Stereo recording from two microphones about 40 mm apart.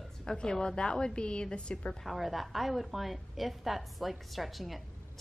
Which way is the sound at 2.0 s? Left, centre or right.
Centre.